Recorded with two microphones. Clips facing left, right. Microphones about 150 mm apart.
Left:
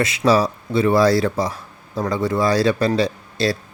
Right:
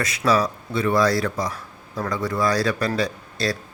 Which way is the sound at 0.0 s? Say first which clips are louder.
Left 4 dB; 25° left (ahead or behind).